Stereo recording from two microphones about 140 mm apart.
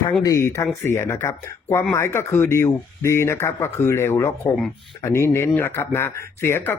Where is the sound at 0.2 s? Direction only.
25° left (ahead or behind).